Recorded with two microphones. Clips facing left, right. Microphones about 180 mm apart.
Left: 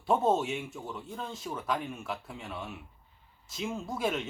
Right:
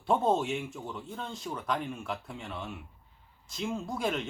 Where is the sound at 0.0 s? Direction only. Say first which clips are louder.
Even; 5° left (ahead or behind).